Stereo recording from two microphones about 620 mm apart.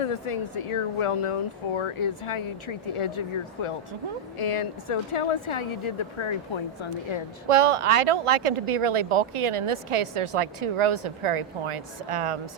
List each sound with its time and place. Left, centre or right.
0.0 s speech: left
7.4 s a woman's voice: right